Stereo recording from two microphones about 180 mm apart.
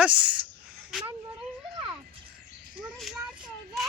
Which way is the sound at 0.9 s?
5° right (ahead or behind).